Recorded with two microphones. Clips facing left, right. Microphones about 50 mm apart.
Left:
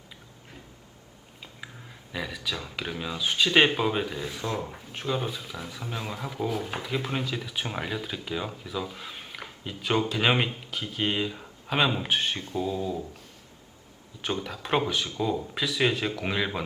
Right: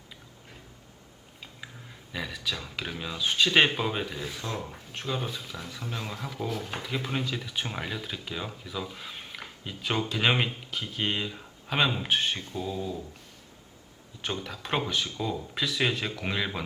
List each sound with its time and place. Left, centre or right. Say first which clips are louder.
2.1 s speech: left 1 dB; centre
14.4 s speech: left 4 dB; centre